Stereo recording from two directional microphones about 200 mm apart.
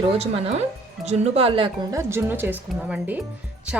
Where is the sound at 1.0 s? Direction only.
35° right (ahead or behind).